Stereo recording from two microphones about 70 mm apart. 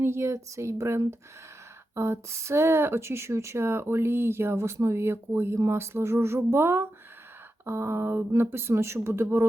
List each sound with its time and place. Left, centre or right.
0.0 s speech: right